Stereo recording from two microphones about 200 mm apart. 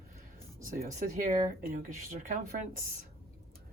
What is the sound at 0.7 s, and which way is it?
Speech, 35° right (ahead or behind).